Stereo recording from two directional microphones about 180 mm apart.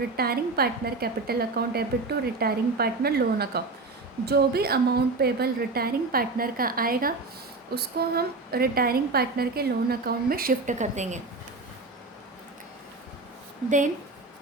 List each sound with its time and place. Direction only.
0.2 s a woman's voice: 60° right (ahead or behind); by 11.2 s 40° right (ahead or behind)
13.7 s a woman's voice: 45° right (ahead or behind)